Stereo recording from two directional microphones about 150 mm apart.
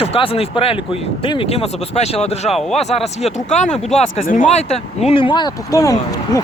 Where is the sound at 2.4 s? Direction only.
Centre (ahead or behind).